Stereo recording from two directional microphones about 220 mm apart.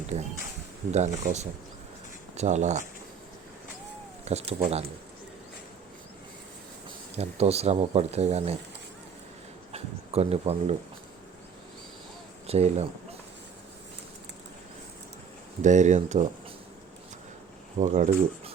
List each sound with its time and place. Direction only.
0.1 s speech: 30° right (ahead or behind)
4.3 s speech: 30° right (ahead or behind)
7.2 s speech: 30° right (ahead or behind)
9.7 s speech: 30° right (ahead or behind)
12.5 s speech: 30° right (ahead or behind)
15.6 s speech: 35° right (ahead or behind)
17.7 s speech: 35° right (ahead or behind)